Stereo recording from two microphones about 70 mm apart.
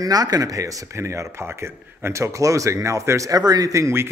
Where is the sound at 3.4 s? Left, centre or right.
Right.